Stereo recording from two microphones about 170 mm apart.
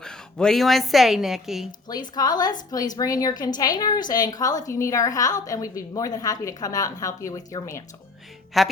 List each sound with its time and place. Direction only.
0.0 s a woman's voice: 5° left (ahead or behind)
1.9 s a woman's voice: 25° left (ahead or behind)
8.6 s a woman's voice: centre (ahead or behind)